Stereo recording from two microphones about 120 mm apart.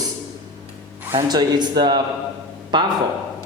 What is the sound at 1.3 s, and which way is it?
A man's voice, 35° right (ahead or behind).